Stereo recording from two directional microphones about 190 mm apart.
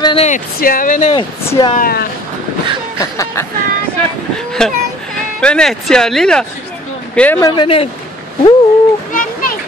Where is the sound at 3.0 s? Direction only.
15° left (ahead or behind).